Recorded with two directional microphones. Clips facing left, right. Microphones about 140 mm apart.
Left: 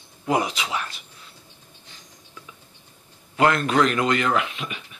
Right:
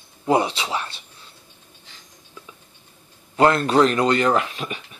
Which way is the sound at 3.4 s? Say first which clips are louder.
Right 3 dB; 30° right (ahead or behind).